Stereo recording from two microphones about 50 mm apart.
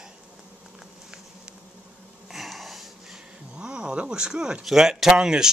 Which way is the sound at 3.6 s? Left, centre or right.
Centre.